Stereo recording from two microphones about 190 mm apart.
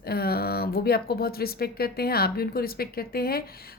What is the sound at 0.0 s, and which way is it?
Speech, 55° left (ahead or behind).